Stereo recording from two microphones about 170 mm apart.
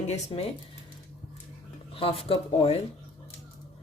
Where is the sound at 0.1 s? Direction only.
40° left (ahead or behind).